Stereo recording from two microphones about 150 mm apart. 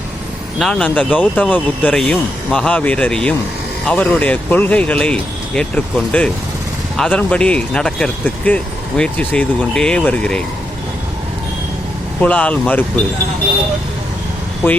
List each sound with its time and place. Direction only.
0.6 s speech: 5° left (ahead or behind)
12.2 s speech: 10° left (ahead or behind)